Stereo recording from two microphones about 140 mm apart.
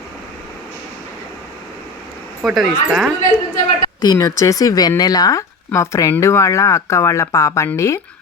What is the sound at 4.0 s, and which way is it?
Speech, 25° left (ahead or behind).